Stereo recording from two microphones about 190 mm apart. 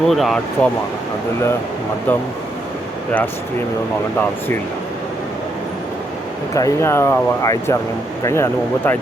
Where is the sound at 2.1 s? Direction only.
10° left (ahead or behind).